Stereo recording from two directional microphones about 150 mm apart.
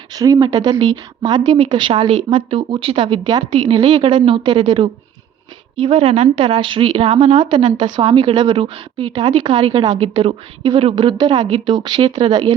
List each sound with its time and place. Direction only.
0.1 s a woman's voice: 25° right (ahead or behind)
6.1 s a woman's voice: 55° right (ahead or behind)
6.4 s a woman's voice: 35° right (ahead or behind)